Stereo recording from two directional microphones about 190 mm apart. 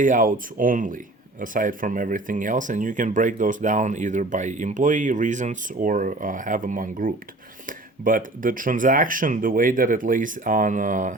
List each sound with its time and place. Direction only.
0.0 s speech: 45° right (ahead or behind)